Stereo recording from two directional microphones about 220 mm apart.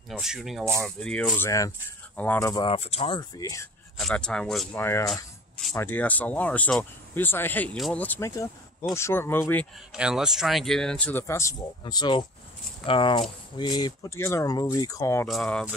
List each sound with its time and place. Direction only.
0.1 s speech: centre (ahead or behind); by 3.6 s 15° left (ahead or behind)
4.0 s speech: 5° left (ahead or behind)
5.1 s a sound: centre (ahead or behind)
5.8 s speech: 10° left (ahead or behind)
9.9 s speech: 5° right (ahead or behind); by 15.2 s 15° left (ahead or behind)
15.2 s speech: centre (ahead or behind)